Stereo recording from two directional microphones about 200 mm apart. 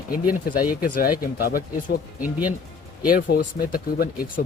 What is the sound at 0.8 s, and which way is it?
Speech, 45° left (ahead or behind).